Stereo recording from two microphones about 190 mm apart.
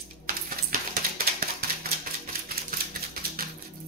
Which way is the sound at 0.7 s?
50° right (ahead or behind).